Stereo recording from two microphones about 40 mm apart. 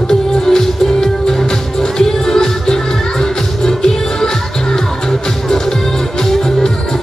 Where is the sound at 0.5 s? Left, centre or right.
Centre.